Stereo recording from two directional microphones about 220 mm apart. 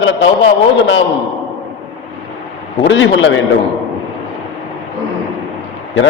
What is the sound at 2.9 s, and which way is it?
Speech, 55° left (ahead or behind).